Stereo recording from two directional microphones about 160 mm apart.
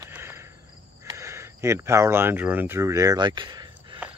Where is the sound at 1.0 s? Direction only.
15° right (ahead or behind).